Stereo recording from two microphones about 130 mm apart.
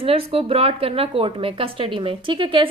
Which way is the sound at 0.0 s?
45° right (ahead or behind).